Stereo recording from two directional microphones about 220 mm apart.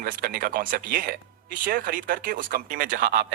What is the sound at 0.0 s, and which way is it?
Speech, 40° right (ahead or behind).